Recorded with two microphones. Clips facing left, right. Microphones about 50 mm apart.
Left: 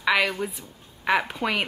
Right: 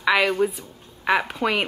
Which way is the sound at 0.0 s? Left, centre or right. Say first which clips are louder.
Right 2 dB; centre.